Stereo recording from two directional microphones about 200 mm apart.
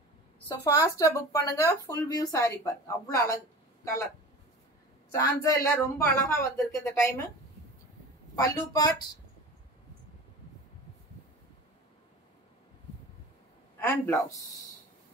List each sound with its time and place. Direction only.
0.5 s speech: 15° left (ahead or behind)
5.1 s speech: 15° left (ahead or behind)
8.4 s speech: 20° left (ahead or behind)
13.7 s a man's voice: 10° left (ahead or behind)